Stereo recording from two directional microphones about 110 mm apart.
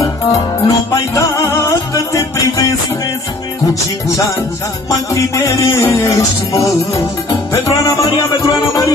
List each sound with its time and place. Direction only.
0.0 s music: 30° left (ahead or behind)
5.1 s music: 30° left (ahead or behind)